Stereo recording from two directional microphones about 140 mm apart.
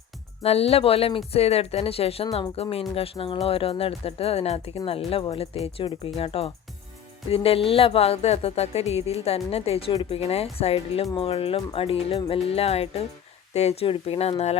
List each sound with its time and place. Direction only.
0.4 s speech: 45° left (ahead or behind)